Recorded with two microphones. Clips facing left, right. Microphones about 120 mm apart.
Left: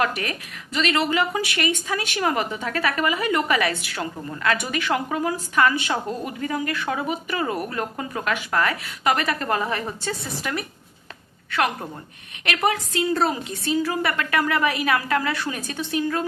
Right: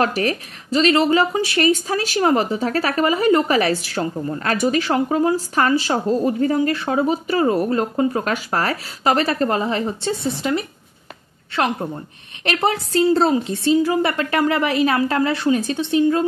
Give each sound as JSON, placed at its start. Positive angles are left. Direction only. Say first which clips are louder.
{"t": 0.0, "sound": "a woman's voice", "louder": "right 5 dB", "side_deg": -35}